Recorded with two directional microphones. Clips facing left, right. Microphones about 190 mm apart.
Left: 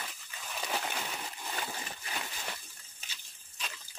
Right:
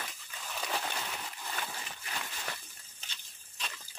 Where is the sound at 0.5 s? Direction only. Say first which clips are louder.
Left 1 dB; 5° left (ahead or behind).